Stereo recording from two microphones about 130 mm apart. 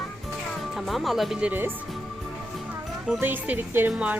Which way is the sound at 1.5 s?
15° right (ahead or behind).